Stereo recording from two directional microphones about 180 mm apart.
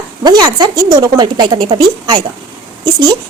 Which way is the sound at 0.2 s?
25° right (ahead or behind).